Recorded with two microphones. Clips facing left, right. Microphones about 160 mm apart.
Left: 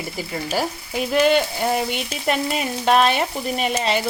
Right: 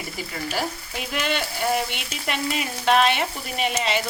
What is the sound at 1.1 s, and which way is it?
Frying, 40° left (ahead or behind).